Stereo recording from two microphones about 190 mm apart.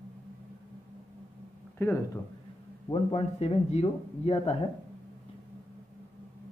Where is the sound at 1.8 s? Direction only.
15° left (ahead or behind).